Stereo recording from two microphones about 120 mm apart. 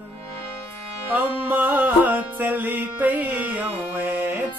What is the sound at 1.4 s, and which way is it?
Music, 15° right (ahead or behind).